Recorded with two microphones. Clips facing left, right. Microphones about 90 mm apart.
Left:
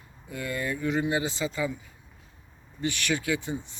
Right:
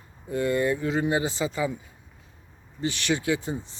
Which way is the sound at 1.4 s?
20° right (ahead or behind).